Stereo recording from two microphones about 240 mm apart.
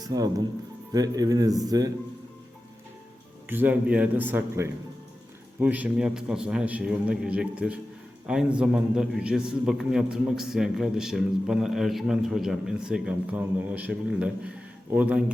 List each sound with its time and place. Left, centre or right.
0.0 s speech: centre
3.5 s a man's voice: centre